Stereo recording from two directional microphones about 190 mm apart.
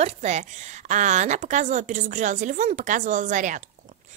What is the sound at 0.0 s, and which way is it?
A woman's voice, 35° right (ahead or behind).